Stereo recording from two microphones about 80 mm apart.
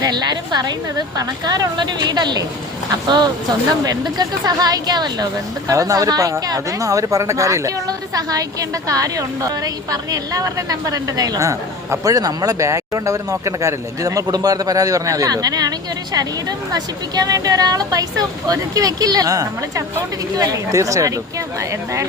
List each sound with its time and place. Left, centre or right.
0.0 s a woman's voice: right
5.7 s speech: right